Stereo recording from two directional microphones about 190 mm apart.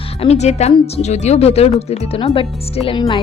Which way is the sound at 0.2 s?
35° left (ahead or behind).